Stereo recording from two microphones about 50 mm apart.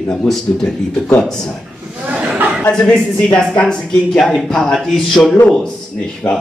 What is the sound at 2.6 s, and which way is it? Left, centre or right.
A man's voice, centre.